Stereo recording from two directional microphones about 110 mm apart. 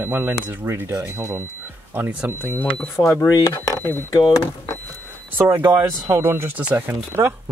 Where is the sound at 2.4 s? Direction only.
15° left (ahead or behind).